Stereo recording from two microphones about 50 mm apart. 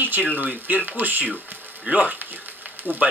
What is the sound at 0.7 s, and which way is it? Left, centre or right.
Speech, right.